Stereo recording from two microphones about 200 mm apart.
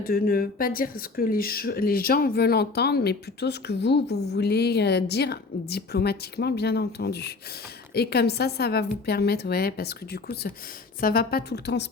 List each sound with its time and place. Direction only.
0.0 s speech: 45° left (ahead or behind)